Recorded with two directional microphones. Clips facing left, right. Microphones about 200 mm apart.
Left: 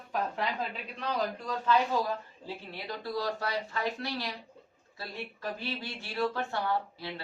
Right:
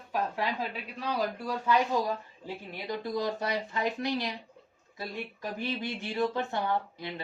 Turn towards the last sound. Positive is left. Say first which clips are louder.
# right 1 dB
turn(degrees=-20)  # may be behind; listen again after turning